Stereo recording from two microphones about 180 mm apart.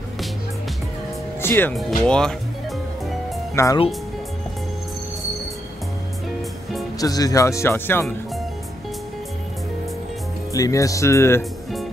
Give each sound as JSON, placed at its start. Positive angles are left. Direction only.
{"t": 1.4, "sound": "speech", "side_deg": 10}
{"t": 3.5, "sound": "speech", "side_deg": 15}
{"t": 7.0, "sound": "speech", "side_deg": 20}
{"t": 10.5, "sound": "speech", "side_deg": 20}